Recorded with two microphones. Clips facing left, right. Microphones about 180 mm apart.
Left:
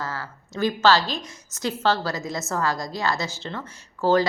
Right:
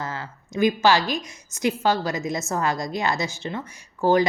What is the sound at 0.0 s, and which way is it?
A woman's voice, 20° right (ahead or behind).